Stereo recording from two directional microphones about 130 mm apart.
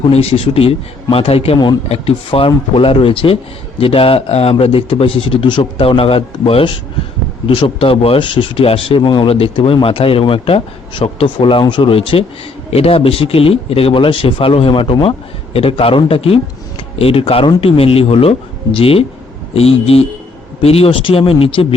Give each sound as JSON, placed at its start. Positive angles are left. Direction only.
{"t": 0.1, "sound": "speech", "side_deg": 50}